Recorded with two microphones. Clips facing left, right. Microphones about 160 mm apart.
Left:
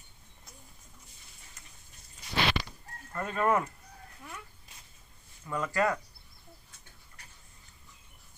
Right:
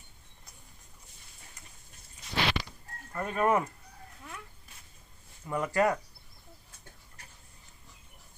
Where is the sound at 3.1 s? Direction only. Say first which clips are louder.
Right 1 dB; 10° right (ahead or behind).